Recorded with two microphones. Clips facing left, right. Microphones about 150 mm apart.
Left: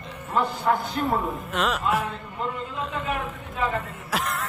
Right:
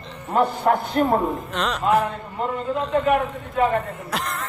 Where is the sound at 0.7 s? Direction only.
50° right (ahead or behind).